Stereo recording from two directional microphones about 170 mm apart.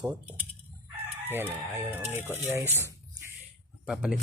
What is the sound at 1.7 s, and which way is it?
Speech, 15° right (ahead or behind).